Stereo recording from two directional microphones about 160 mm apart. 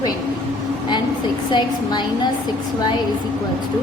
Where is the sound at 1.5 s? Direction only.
25° left (ahead or behind).